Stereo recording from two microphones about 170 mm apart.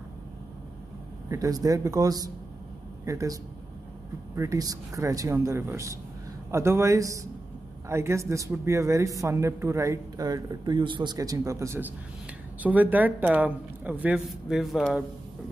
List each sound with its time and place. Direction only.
1.3 s speech: 20° right (ahead or behind)
4.4 s speech: 20° right (ahead or behind); by 15.0 s centre (ahead or behind)